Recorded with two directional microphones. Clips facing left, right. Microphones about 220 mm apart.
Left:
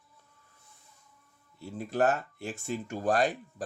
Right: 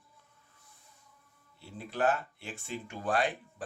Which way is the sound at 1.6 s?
45° left (ahead or behind).